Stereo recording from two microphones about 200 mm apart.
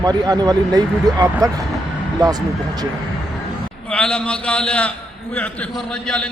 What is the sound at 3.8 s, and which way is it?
A man's voice, 5° left (ahead or behind).